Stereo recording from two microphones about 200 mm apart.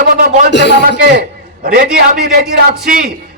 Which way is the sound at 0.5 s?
60° left (ahead or behind).